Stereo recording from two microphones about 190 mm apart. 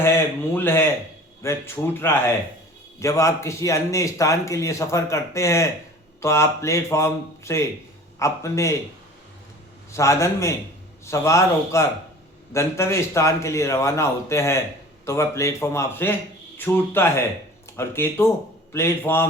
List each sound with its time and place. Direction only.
0.0 s a man's voice: 10° left (ahead or behind)
9.9 s a man's voice: 15° left (ahead or behind)